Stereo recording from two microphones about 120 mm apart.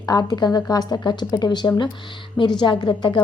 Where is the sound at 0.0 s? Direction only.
35° left (ahead or behind).